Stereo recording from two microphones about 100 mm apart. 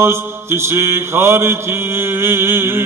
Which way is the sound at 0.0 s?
25° right (ahead or behind).